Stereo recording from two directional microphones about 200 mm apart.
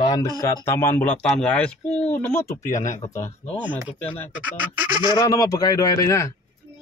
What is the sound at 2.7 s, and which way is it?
Speech, 40° left (ahead or behind).